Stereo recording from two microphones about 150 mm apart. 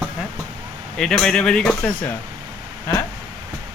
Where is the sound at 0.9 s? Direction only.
5° left (ahead or behind).